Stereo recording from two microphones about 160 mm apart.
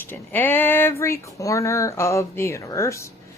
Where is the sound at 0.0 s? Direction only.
10° left (ahead or behind).